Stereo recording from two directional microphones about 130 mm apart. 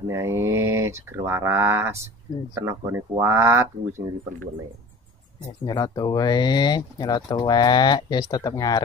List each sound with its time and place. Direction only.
0.0 s speech: 20° right (ahead or behind)
5.7 s speech: 30° left (ahead or behind)